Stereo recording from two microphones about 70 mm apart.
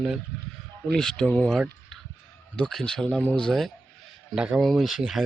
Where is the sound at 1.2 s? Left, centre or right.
Left.